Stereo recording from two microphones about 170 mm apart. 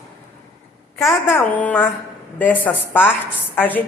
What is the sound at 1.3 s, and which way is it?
A woman's voice, 10° left (ahead or behind).